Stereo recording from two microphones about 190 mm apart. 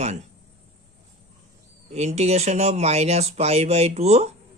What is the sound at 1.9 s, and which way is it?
Speech, 35° right (ahead or behind).